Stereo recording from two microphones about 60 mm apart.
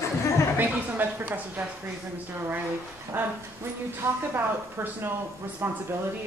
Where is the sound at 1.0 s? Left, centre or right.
Right.